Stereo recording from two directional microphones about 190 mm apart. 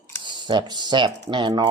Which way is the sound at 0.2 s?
25° right (ahead or behind).